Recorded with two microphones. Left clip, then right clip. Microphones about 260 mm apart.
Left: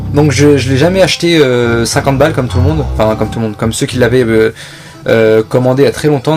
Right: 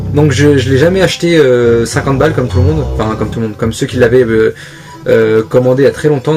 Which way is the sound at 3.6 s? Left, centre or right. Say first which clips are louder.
Right 1 dB; left.